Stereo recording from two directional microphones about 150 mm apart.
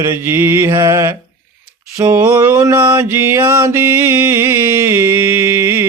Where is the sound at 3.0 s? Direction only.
15° right (ahead or behind).